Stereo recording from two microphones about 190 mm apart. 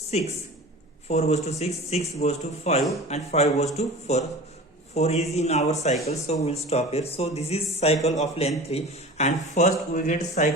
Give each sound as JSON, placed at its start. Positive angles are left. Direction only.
{"t": 0.1, "sound": "a man's voice", "side_deg": 35}